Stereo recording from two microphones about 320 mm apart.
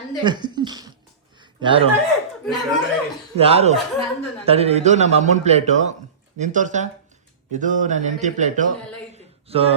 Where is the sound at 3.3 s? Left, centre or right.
Centre.